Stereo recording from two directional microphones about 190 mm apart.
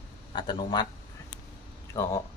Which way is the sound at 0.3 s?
25° left (ahead or behind).